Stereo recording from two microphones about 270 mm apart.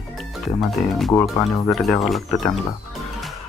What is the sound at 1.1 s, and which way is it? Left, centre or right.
Speech, centre.